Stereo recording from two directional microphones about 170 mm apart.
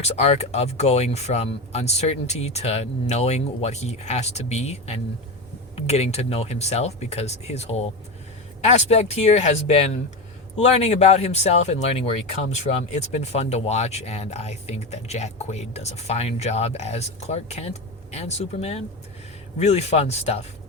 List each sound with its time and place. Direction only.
0.0 s speech: 40° left (ahead or behind)